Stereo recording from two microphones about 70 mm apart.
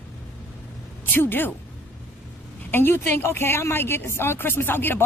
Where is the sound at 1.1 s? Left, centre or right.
Left.